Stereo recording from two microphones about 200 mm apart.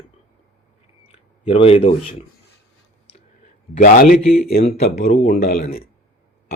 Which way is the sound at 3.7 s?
45° left (ahead or behind).